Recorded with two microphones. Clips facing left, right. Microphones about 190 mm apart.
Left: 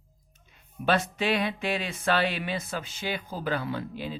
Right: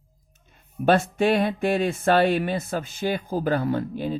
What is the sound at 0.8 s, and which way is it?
Speech, 50° right (ahead or behind).